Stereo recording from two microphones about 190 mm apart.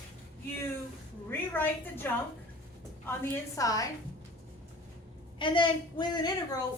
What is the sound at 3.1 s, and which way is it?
Speech, 15° left (ahead or behind).